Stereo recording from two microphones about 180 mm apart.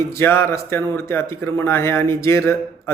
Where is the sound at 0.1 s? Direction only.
15° left (ahead or behind).